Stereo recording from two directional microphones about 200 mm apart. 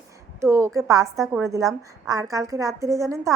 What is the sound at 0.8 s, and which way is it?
Speech, 15° right (ahead or behind).